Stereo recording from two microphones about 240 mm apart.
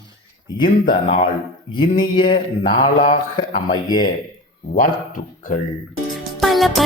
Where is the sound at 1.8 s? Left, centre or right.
Centre.